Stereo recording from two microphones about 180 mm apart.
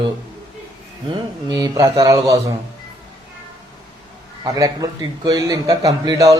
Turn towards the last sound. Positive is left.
turn(degrees=-20)  # may be behind; listen again after turning